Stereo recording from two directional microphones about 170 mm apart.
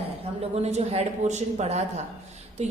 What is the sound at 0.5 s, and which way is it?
A woman's voice, 40° right (ahead or behind).